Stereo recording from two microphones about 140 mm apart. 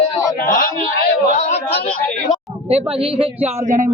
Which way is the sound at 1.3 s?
50° left (ahead or behind).